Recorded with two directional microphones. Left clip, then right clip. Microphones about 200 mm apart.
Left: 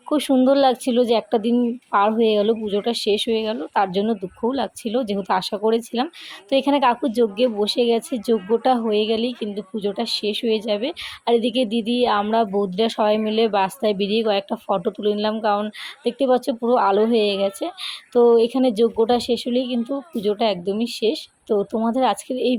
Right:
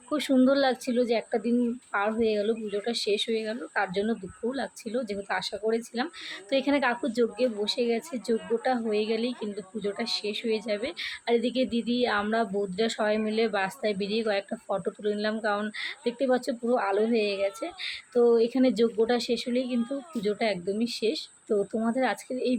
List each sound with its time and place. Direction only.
0.1 s a woman's voice: 25° left (ahead or behind)